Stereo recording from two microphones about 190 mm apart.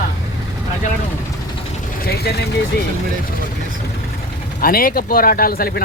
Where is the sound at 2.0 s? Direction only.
55° left (ahead or behind).